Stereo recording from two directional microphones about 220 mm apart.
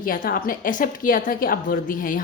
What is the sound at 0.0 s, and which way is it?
A woman's voice, 40° left (ahead or behind).